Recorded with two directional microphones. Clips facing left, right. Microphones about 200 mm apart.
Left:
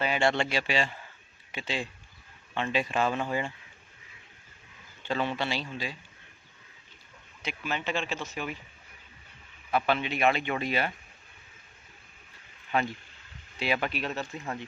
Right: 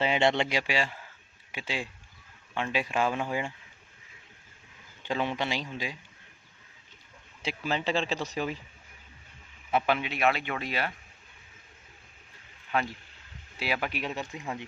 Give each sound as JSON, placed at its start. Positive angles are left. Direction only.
{"t": 0.0, "sound": "speech", "side_deg": -20}
{"t": 5.0, "sound": "speech", "side_deg": -15}
{"t": 7.4, "sound": "speech", "side_deg": -35}
{"t": 9.7, "sound": "speech", "side_deg": -10}
{"t": 10.1, "sound": "speech", "side_deg": 0}
{"t": 12.7, "sound": "speech", "side_deg": 0}